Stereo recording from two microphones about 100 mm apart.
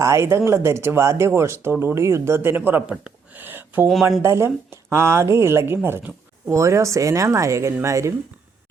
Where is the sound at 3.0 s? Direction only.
20° right (ahead or behind).